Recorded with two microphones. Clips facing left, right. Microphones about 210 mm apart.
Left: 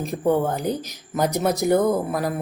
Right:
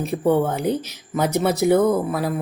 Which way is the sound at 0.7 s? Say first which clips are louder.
Right 3 dB; 40° left (ahead or behind).